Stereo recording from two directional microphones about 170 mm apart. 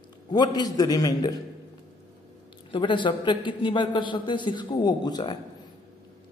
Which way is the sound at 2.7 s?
30° left (ahead or behind).